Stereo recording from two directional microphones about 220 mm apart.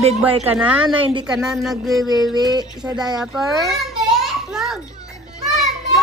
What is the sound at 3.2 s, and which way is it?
Speech, centre (ahead or behind).